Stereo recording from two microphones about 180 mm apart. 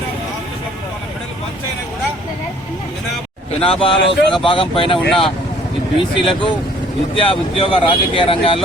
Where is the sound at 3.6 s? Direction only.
30° left (ahead or behind).